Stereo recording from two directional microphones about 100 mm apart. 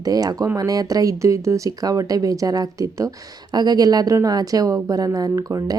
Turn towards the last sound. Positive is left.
turn(degrees=-40)  # may be behind; listen again after turning